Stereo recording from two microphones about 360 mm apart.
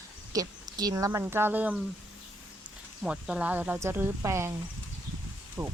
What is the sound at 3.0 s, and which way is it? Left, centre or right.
Speech, centre.